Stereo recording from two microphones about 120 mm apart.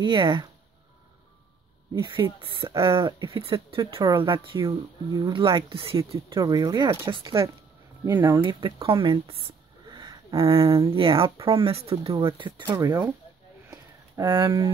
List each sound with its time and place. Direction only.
0.0 s speech: 45° right (ahead or behind)
2.1 s speech: 45° right (ahead or behind)
6.3 s speech: 30° right (ahead or behind)
8.0 s speech: 25° right (ahead or behind)
8.4 s speech: 45° right (ahead or behind)
9.8 s speech: 35° right (ahead or behind); by 11.9 s 55° right (ahead or behind)
12.2 s speech: 45° right (ahead or behind)
13.7 s a sound: 35° right (ahead or behind)